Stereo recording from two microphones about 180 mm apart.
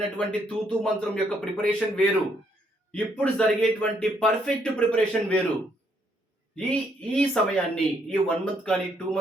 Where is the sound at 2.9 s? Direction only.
5° left (ahead or behind).